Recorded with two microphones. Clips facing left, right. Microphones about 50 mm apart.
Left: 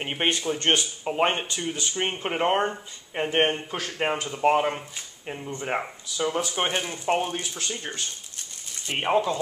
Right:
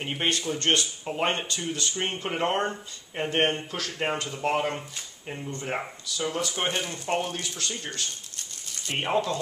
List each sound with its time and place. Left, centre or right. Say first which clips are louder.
0.0 s speech: left 2 dB; left